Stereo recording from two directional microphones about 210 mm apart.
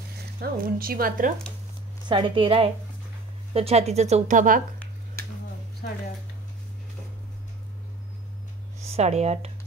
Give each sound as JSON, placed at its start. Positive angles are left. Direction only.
{"t": 0.4, "sound": "speech", "side_deg": -45}
{"t": 2.0, "sound": "a woman's voice", "side_deg": -20}
{"t": 8.8, "sound": "speech", "side_deg": -30}